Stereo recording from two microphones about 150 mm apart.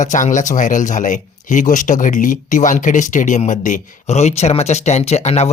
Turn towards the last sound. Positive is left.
turn(degrees=45)  # may be behind; listen again after turning